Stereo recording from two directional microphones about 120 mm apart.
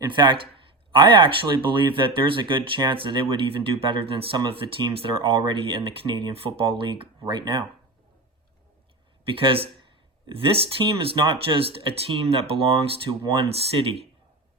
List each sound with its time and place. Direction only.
0.0 s speech: 40° right (ahead or behind)
9.2 s speech: 50° right (ahead or behind)